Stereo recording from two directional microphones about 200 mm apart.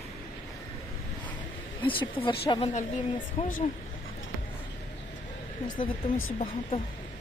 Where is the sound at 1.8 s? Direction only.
25° left (ahead or behind).